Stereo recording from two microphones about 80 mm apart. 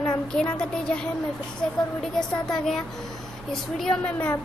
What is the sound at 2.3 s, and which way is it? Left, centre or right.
Speech, centre.